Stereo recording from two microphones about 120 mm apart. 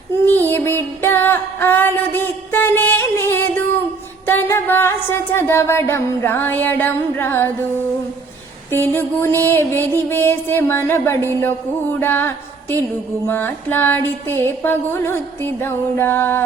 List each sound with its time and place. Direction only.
0.3 s music: 15° left (ahead or behind)
1.0 s a sound: 20° left (ahead or behind)
4.3 s music: 20° left (ahead or behind)
8.7 s music: 20° left (ahead or behind)